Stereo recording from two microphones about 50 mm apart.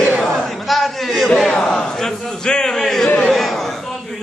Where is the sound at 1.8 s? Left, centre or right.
Centre.